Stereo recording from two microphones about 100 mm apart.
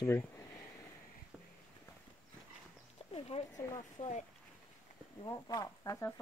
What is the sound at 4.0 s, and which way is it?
Speech, 70° left (ahead or behind).